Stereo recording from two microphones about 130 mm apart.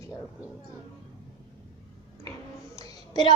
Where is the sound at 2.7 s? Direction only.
30° left (ahead or behind).